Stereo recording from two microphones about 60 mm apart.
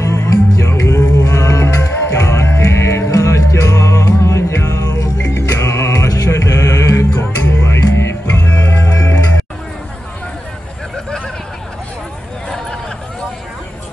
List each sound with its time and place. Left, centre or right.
0.0 s music: left
7.2 s music: left
7.6 s music: left
8.3 s music: left
8.5 s music: left